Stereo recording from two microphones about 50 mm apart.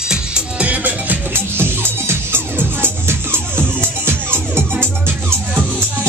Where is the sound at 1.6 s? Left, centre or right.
Right.